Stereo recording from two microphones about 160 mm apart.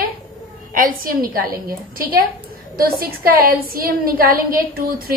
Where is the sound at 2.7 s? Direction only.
70° right (ahead or behind).